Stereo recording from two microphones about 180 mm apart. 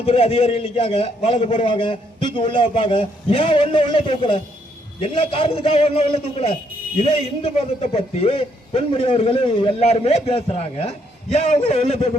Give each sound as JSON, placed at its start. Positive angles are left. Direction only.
{"t": 0.0, "sound": "a man's voice", "side_deg": 35}